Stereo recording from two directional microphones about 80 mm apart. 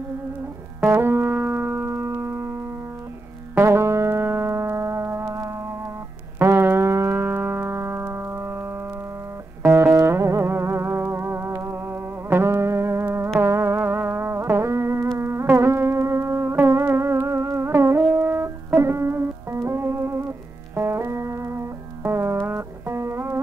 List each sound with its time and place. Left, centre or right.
0.7 s music: right
1.7 s music: right
3.5 s music: right
9.6 s music: right